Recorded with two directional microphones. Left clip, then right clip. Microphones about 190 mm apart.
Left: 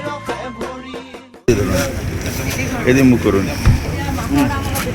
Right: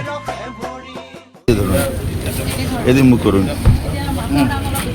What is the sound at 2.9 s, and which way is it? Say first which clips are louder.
Speech: even; 70° right (ahead or behind).